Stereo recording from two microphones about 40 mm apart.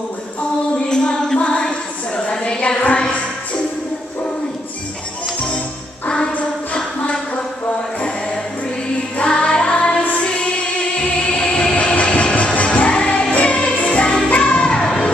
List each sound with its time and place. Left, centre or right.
0.4 s music: left
6.0 s music: left
9.2 s music: left
11.1 s music: left
14.8 s music: centre